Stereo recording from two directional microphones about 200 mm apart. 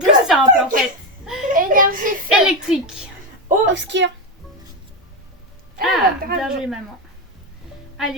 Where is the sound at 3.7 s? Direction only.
65° right (ahead or behind).